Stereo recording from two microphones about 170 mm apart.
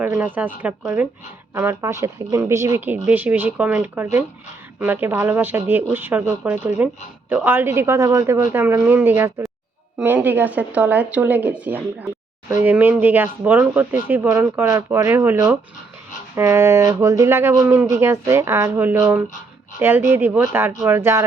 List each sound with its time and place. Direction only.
0.0 s speech: 10° right (ahead or behind)